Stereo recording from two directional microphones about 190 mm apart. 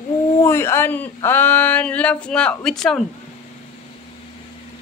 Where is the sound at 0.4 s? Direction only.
15° left (ahead or behind).